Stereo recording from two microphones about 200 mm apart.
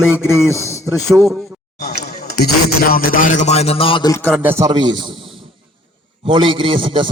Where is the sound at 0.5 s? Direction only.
15° left (ahead or behind).